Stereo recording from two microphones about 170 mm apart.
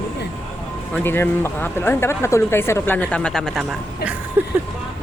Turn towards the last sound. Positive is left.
turn(degrees=-15)  # may be behind; listen again after turning